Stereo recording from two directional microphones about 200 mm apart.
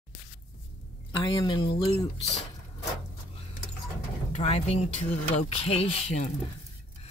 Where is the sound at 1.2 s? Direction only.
25° left (ahead or behind).